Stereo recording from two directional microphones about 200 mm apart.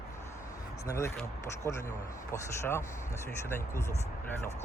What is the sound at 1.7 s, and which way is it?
Speech, 10° left (ahead or behind).